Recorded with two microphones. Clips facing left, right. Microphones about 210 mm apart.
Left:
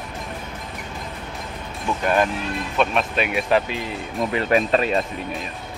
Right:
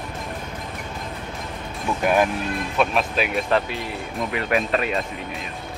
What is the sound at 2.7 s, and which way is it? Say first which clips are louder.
Speech: left 1 dB; centre (ahead or behind).